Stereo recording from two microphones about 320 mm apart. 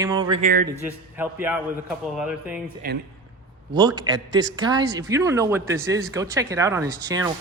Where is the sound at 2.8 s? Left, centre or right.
Right.